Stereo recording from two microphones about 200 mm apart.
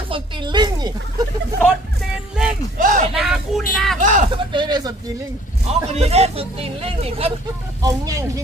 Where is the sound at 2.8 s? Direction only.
40° right (ahead or behind).